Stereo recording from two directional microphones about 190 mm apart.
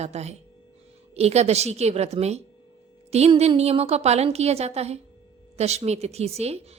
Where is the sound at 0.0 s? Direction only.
35° right (ahead or behind).